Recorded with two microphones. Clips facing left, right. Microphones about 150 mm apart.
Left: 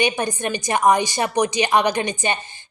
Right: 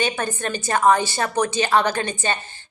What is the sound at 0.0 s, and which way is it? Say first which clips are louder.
A woman's voice: left 2 dB; 15° left (ahead or behind).